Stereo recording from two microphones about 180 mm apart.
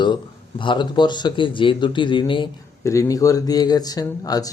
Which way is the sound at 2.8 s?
15° left (ahead or behind).